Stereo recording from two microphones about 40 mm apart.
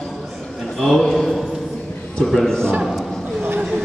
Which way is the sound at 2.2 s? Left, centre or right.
Centre.